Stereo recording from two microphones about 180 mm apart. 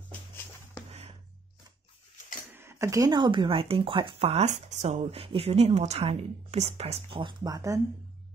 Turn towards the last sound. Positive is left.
turn(degrees=-20)  # may be behind; listen again after turning